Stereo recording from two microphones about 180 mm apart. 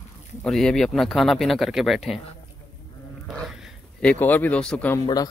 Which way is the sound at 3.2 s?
Centre (ahead or behind).